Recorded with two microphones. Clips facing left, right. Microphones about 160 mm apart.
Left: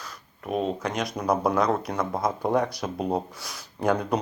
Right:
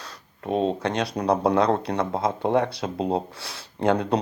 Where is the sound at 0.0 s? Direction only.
30° right (ahead or behind).